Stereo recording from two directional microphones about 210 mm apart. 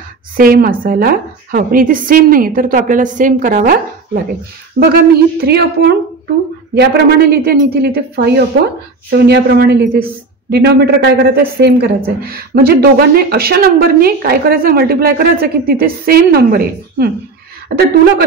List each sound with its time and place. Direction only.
0.4 s a woman's voice: 45° right (ahead or behind)